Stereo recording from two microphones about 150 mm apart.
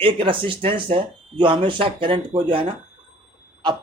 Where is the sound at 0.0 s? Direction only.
35° right (ahead or behind).